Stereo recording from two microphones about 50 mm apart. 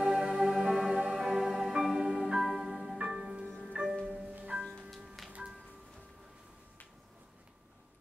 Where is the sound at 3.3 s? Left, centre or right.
Centre.